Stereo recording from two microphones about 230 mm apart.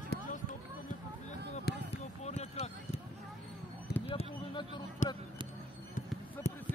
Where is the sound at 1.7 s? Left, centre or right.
Left.